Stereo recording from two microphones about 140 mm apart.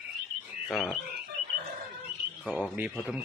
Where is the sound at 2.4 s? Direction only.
5° left (ahead or behind).